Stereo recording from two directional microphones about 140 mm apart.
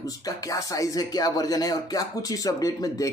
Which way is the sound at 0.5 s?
25° left (ahead or behind).